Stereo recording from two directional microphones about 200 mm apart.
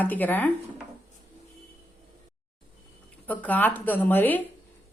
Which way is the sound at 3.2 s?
10° left (ahead or behind).